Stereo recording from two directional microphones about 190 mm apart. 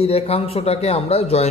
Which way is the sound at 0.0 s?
30° left (ahead or behind).